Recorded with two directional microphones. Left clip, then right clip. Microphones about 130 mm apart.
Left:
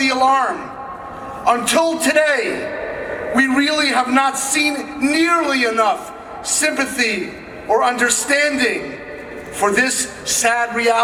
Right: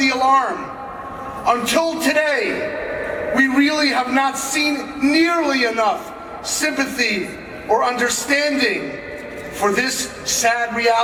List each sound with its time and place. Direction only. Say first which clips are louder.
0.0 s a man's voice: left 1 dB; 45° left (ahead or behind)